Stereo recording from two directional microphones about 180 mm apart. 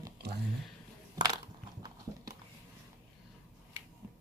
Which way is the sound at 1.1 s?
20° right (ahead or behind).